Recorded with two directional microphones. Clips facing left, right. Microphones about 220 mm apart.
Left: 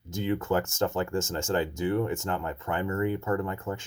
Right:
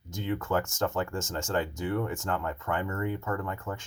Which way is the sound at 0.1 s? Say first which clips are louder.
Left 3 dB; 30° left (ahead or behind).